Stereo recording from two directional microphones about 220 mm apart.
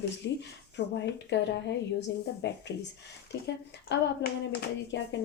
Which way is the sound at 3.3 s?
50° left (ahead or behind).